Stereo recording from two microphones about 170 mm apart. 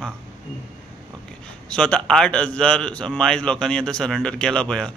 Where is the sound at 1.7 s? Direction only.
5° left (ahead or behind).